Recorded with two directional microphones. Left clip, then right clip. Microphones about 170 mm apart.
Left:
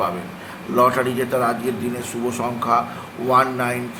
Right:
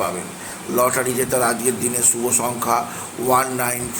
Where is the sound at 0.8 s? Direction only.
10° right (ahead or behind).